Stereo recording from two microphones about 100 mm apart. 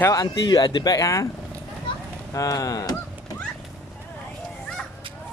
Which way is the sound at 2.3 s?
35° left (ahead or behind).